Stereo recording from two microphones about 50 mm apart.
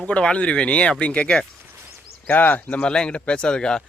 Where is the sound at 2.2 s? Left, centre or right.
Left.